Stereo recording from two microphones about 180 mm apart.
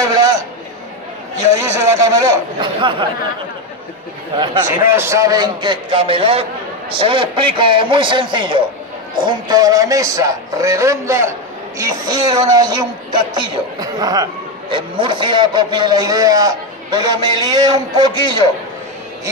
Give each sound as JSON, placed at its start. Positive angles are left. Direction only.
{"t": 1.6, "sound": "a man's voice", "side_deg": -15}
{"t": 4.6, "sound": "a woman's voice", "side_deg": -15}